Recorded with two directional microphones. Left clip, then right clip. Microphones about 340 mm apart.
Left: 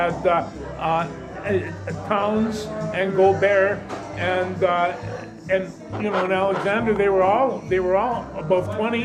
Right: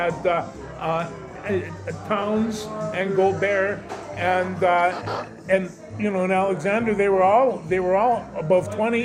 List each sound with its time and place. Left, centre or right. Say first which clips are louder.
0.0 s speech: left 2 dB; centre
5.5 s a man's voice: right 1 dB; right